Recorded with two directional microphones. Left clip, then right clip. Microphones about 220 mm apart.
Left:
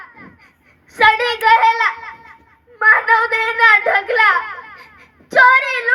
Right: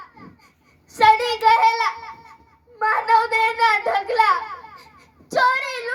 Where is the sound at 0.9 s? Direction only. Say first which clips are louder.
Left 2 dB; 60° right (ahead or behind).